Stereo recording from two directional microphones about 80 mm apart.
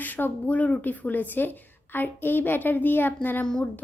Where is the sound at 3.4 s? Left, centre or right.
Centre.